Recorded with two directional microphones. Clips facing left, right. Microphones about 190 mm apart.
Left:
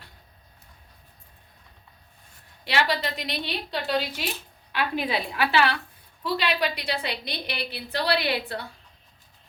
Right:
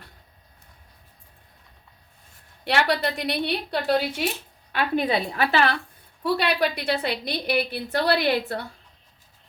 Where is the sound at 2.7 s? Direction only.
55° right (ahead or behind).